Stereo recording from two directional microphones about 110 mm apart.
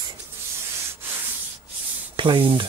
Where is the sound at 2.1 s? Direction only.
45° right (ahead or behind).